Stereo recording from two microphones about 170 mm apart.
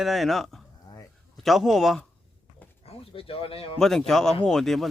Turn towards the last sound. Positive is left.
turn(degrees=0)  # may be behind; listen again after turning